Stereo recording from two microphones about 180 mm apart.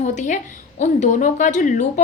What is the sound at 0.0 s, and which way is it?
A woman's voice, 40° left (ahead or behind).